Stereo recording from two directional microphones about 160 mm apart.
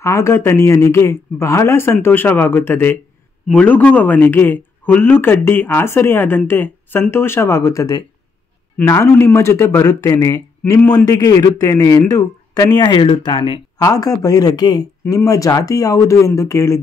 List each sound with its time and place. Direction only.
0.0 s speech: 15° left (ahead or behind); by 13.6 s 35° left (ahead or behind)
13.7 s speech: 25° left (ahead or behind)